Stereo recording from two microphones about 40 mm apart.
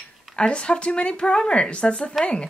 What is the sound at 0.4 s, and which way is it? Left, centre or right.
Speech, left.